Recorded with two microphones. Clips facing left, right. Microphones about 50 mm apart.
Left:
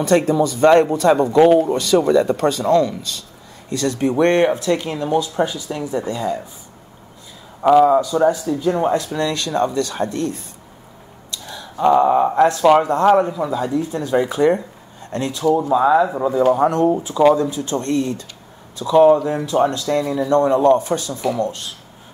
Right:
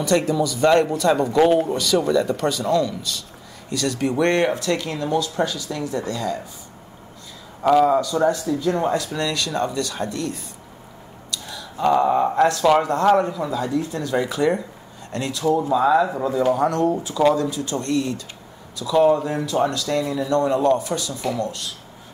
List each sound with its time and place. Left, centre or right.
0.0 s speech: left
1.3 s speech: centre
1.7 s speech: left
7.6 s speech: centre; by 10.4 s left
11.3 s a sound: left; by 12.4 s centre
12.4 s speech: centre
15.7 s speech: centre
16.5 s speech: left